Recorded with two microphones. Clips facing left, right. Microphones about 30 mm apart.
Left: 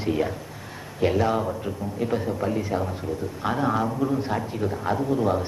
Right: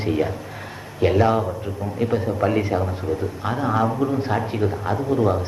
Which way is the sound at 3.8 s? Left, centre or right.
Centre.